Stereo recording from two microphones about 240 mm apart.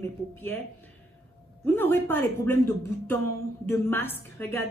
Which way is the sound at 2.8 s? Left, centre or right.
Right.